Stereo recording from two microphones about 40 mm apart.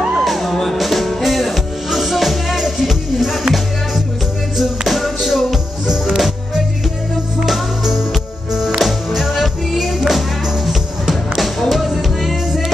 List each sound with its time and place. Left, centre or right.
0.2 s music: centre